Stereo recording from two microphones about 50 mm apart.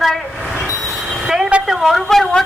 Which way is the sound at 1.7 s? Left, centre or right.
Centre.